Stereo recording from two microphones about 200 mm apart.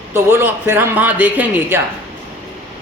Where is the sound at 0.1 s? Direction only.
10° right (ahead or behind).